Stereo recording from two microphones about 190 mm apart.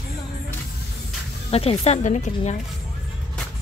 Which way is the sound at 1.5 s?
30° left (ahead or behind).